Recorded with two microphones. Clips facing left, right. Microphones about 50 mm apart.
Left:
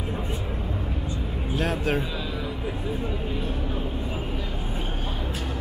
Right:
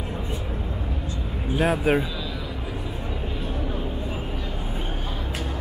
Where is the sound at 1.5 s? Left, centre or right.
Centre.